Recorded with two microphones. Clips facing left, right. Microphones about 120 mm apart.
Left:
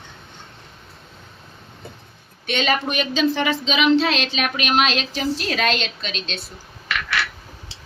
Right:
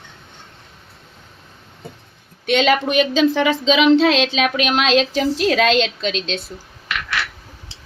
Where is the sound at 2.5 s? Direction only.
90° right.